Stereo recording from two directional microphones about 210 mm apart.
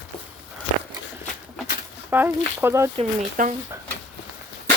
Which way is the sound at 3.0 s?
35° right (ahead or behind).